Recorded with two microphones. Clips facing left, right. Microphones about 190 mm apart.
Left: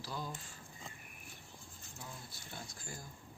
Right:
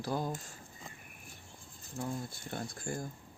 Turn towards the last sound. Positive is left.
turn(degrees=-55)  # may be behind; listen again after turning